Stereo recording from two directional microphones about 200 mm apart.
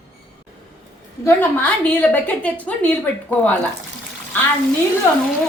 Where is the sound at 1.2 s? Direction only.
10° left (ahead or behind).